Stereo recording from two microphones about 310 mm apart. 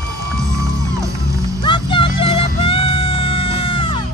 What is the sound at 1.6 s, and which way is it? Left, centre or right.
Music, centre.